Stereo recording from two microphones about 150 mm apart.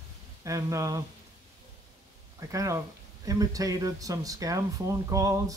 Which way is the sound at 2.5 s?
20° right (ahead or behind).